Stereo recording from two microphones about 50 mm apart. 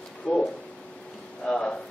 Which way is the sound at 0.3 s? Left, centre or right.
Centre.